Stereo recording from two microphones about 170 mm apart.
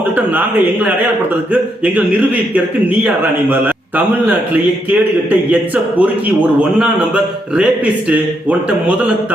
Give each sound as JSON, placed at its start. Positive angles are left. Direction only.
{"t": 0.3, "sound": "a man's voice", "side_deg": -10}
{"t": 3.5, "sound": "a man's voice", "side_deg": -10}